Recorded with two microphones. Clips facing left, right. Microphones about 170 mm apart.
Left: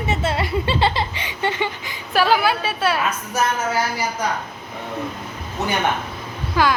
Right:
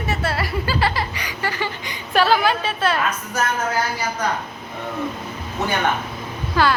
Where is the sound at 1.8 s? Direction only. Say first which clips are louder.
Right 4 dB; 5° left (ahead or behind).